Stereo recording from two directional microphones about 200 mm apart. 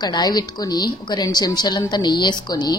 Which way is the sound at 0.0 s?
20° left (ahead or behind).